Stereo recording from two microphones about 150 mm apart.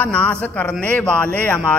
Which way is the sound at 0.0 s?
10° left (ahead or behind).